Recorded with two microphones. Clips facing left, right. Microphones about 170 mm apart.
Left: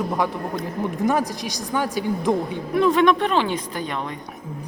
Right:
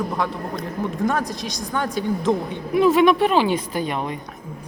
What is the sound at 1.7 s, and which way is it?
Speech, 10° left (ahead or behind).